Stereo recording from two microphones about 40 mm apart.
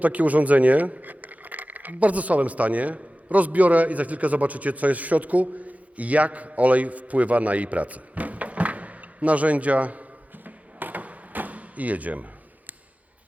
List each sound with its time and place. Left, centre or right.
0.0 s speech: right